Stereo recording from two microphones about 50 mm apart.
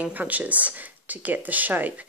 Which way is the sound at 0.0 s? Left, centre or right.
Right.